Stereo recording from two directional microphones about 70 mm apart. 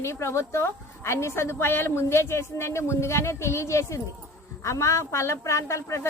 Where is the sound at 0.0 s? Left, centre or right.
Left.